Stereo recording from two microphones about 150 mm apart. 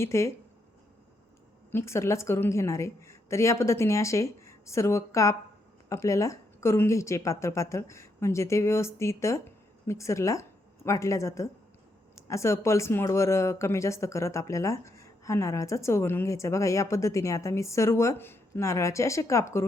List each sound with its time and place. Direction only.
0.0 s speech: 20° left (ahead or behind)
1.7 s speech: 15° left (ahead or behind)